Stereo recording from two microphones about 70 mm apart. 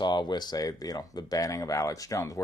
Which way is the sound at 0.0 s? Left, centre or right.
Left.